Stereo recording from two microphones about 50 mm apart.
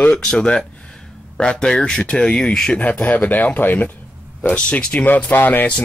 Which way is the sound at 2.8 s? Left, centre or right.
Left.